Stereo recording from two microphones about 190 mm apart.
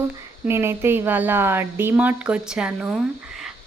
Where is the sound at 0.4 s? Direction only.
15° right (ahead or behind).